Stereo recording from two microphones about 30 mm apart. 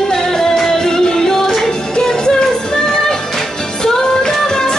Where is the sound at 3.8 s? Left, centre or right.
Left.